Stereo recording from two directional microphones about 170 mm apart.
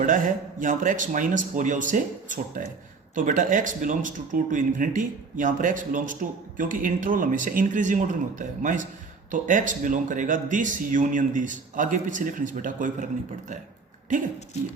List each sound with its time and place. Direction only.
0.0 s speech: 50° right (ahead or behind)